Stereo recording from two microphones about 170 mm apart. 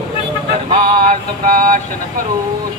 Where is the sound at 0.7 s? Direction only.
50° right (ahead or behind).